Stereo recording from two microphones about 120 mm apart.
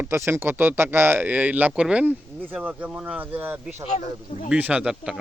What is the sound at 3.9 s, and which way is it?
Speech, 70° left (ahead or behind).